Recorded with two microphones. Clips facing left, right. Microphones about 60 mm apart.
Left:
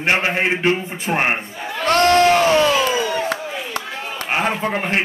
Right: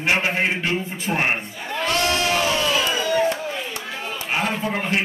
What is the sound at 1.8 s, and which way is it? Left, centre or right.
Crowd, left.